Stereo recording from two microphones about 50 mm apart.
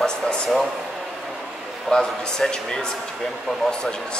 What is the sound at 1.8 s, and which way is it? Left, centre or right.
Speech, centre.